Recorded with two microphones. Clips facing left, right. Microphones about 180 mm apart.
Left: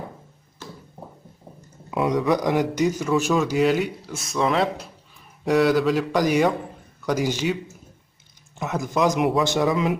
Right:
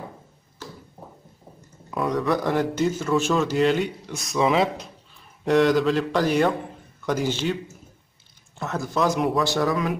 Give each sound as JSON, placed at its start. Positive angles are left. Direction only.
{"t": 1.9, "sound": "a sound", "side_deg": 20}
{"t": 2.2, "sound": "a man's voice", "side_deg": 15}
{"t": 8.5, "sound": "a man's voice", "side_deg": 15}